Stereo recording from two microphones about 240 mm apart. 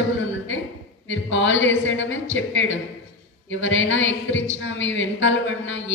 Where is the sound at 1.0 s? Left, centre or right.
Left.